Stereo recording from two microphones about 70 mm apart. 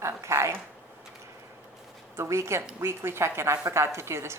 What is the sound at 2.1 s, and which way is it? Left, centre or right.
A woman's voice, right.